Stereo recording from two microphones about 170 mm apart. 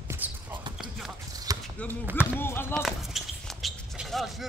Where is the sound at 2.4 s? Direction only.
15° left (ahead or behind).